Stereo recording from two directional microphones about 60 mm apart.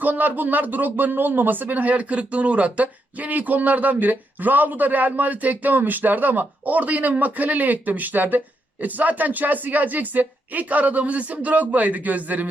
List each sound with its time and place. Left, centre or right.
0.0 s speech: right